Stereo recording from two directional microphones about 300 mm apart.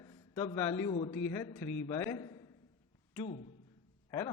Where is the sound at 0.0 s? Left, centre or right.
Centre.